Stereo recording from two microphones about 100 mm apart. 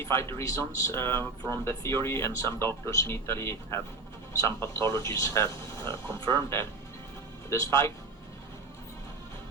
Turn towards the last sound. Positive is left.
turn(degrees=30)  # may be behind; listen again after turning